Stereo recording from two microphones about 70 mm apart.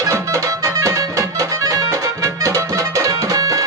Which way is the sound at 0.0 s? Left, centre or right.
Right.